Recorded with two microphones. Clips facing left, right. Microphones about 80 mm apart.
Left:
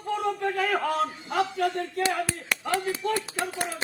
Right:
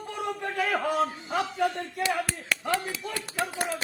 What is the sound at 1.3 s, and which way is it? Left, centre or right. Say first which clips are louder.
Speech: left 2 dB; centre.